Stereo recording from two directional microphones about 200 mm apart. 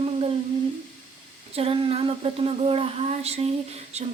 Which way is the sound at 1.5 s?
30° right (ahead or behind).